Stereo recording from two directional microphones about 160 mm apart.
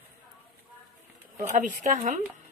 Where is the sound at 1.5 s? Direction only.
50° right (ahead or behind).